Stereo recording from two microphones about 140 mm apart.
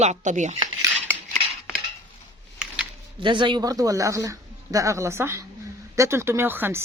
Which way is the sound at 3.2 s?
35° right (ahead or behind).